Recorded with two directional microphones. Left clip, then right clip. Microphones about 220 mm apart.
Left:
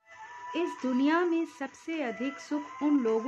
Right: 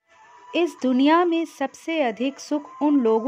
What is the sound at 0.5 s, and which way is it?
Speech, 40° right (ahead or behind).